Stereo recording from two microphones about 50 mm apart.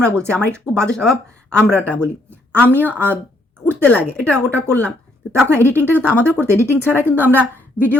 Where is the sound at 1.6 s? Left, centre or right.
Right.